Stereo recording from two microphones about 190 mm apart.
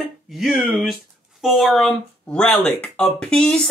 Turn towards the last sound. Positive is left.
turn(degrees=5)  # may be behind; listen again after turning